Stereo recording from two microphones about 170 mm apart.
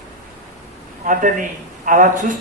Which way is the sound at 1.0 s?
50° right (ahead or behind).